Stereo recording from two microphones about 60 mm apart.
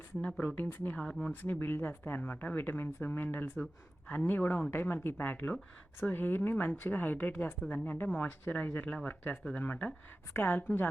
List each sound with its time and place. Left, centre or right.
0.2 s speech: left
0.9 s speech: centre
1.3 s speech: left
9.3 s speech: centre
9.6 s speech: left
10.3 s speech: left